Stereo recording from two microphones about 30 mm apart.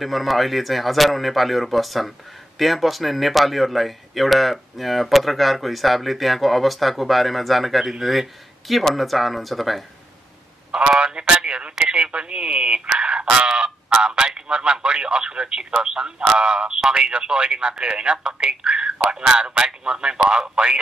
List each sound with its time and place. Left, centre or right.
0.0 s speech: centre
10.7 s speech: right